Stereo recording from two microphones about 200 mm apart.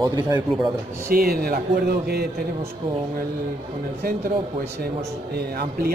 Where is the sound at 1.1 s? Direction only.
50° right (ahead or behind).